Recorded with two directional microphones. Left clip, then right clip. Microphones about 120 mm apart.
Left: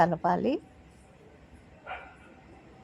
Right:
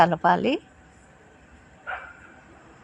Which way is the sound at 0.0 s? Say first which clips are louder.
Right 6 dB; 10° right (ahead or behind).